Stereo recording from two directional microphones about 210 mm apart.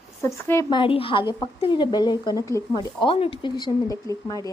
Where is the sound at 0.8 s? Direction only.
25° left (ahead or behind).